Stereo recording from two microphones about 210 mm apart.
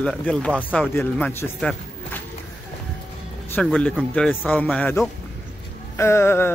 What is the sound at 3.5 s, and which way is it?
Speech, 5° left (ahead or behind).